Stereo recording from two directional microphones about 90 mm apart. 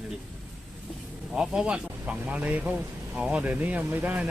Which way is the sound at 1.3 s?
10° right (ahead or behind).